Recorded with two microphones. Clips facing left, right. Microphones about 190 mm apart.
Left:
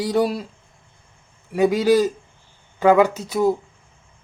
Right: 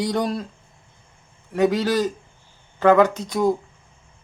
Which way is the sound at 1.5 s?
10° left (ahead or behind).